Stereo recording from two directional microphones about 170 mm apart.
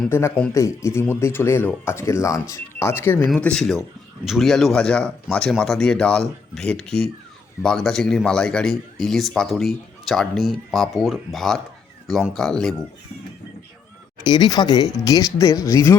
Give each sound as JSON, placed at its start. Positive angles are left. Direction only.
{"t": 0.1, "sound": "speech", "side_deg": 15}
{"t": 14.3, "sound": "speech", "side_deg": 25}